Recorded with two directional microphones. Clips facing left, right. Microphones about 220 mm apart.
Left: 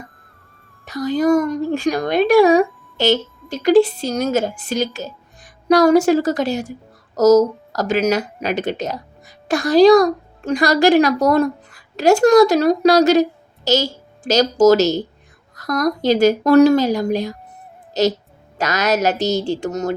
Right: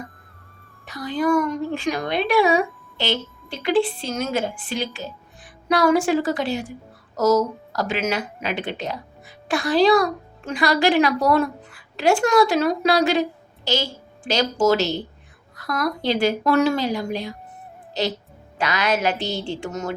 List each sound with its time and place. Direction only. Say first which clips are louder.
0.9 s speech: left 6 dB; 40° left (ahead or behind)